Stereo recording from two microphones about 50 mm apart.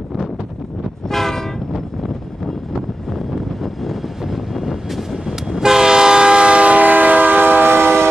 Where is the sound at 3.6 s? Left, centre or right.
Centre; by 8.1 s right.